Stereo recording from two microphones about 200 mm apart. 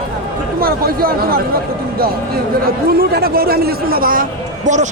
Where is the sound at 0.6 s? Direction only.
50° right (ahead or behind).